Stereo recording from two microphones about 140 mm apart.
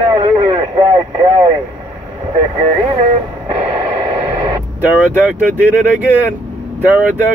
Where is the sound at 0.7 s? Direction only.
35° right (ahead or behind).